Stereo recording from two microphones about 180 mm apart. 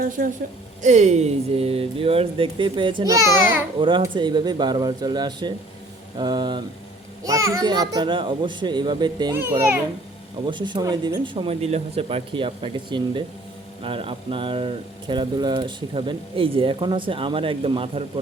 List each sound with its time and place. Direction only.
0.0 s a woman's voice: 50° right (ahead or behind)
0.8 s speech: 40° right (ahead or behind); by 9.3 s 25° right (ahead or behind)
9.3 s a child's voice: 10° right (ahead or behind)
10.4 s speech: 25° right (ahead or behind)